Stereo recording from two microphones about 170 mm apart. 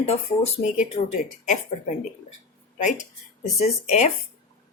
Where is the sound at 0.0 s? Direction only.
40° left (ahead or behind).